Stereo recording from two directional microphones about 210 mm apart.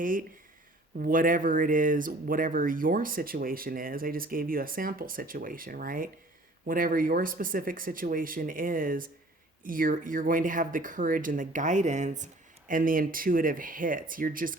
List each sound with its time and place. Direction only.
0.0 s speech: 40° right (ahead or behind)